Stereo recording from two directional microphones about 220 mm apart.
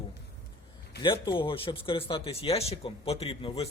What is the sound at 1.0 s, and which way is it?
A man's voice, 20° left (ahead or behind).